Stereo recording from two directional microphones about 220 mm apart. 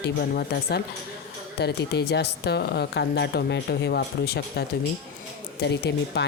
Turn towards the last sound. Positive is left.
turn(degrees=50)  # may be behind; listen again after turning